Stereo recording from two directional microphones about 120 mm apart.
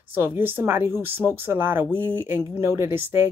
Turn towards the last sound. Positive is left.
turn(degrees=-20)  # may be behind; listen again after turning